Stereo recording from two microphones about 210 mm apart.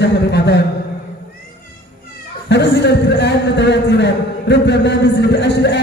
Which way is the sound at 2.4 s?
55° left (ahead or behind).